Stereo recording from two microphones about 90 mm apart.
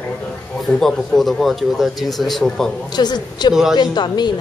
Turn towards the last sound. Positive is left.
turn(degrees=55)  # may be behind; listen again after turning